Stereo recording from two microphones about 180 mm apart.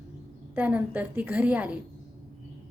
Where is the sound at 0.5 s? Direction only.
10° right (ahead or behind).